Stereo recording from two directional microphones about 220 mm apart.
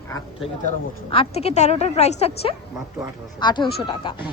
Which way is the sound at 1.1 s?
25° left (ahead or behind).